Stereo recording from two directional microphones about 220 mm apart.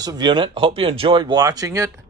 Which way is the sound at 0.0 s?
20° right (ahead or behind).